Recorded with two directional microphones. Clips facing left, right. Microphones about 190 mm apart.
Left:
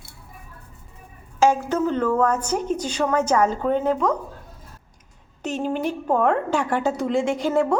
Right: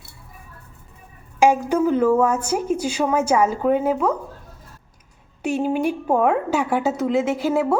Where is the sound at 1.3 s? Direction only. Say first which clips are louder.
Right 2 dB; 15° right (ahead or behind).